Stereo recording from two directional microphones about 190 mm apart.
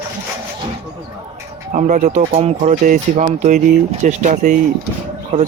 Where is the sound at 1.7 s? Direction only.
40° right (ahead or behind).